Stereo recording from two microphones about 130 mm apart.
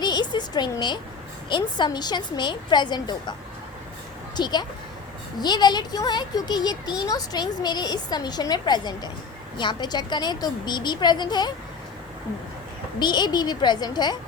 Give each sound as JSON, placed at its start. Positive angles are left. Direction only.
{"t": 0.0, "sound": "a sound", "side_deg": 35}
{"t": 1.5, "sound": "a child's voice", "side_deg": 35}
{"t": 4.4, "sound": "a child's voice", "side_deg": 35}
{"t": 13.0, "sound": "a child's voice", "side_deg": 35}